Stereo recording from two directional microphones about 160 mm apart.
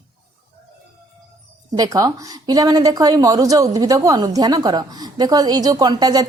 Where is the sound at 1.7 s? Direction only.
20° right (ahead or behind).